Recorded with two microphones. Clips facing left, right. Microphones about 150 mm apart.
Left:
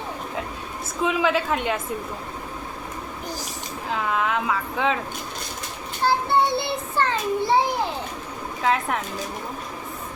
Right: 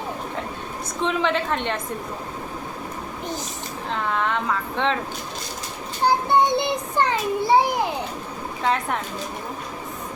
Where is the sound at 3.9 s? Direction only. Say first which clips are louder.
Even; 5° left (ahead or behind).